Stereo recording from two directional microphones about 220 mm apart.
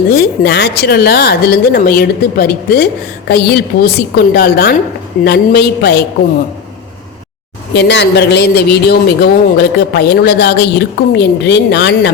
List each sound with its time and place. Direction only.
0.1 s a man's voice: 50° left (ahead or behind)
7.7 s a man's voice: 50° left (ahead or behind)